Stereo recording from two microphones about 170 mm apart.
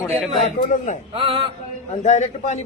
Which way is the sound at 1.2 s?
30° right (ahead or behind).